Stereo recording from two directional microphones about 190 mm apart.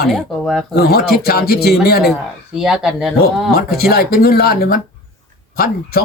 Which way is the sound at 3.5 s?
55° left (ahead or behind).